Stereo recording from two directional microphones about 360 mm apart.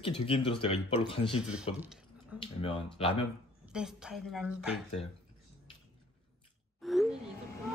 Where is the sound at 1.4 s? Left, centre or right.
Centre.